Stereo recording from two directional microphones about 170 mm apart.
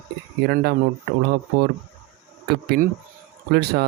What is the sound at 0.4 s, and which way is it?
Speech, 65° right (ahead or behind).